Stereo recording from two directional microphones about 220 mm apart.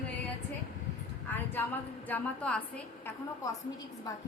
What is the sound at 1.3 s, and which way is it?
A woman's voice, 10° left (ahead or behind).